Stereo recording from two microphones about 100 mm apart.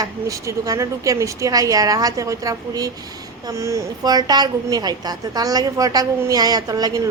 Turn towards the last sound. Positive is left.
turn(degrees=-40)  # may be behind; listen again after turning